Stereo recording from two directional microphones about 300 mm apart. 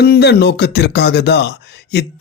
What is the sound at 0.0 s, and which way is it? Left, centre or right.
Speech, left.